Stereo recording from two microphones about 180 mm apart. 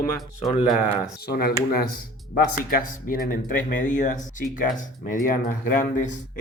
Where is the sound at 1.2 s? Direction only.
60° left (ahead or behind).